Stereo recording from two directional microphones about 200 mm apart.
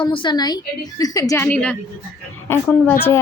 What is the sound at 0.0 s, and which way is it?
A woman's voice, 25° left (ahead or behind).